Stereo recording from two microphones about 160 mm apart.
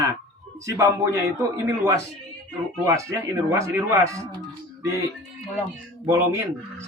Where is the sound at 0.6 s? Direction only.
20° right (ahead or behind).